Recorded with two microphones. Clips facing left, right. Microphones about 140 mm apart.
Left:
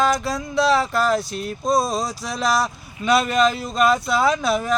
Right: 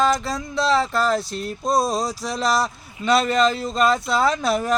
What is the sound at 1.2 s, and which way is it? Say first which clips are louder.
Speech: left 1 dB; 30° right (ahead or behind).